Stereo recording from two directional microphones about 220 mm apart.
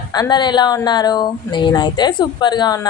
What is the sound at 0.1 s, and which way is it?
Speech, 20° left (ahead or behind).